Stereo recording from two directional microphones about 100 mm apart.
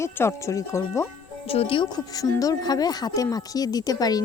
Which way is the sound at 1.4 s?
70° left (ahead or behind).